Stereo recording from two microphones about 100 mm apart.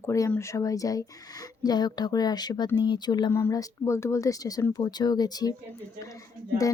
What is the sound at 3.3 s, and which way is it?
Speech, 25° left (ahead or behind).